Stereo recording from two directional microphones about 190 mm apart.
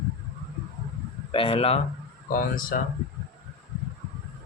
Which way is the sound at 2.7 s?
50° left (ahead or behind).